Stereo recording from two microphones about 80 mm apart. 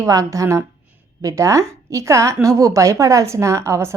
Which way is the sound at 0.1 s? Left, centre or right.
Right.